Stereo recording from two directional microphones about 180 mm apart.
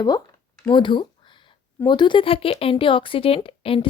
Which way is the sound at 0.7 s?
25° left (ahead or behind).